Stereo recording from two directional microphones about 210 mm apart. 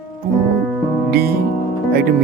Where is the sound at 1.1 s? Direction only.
45° right (ahead or behind).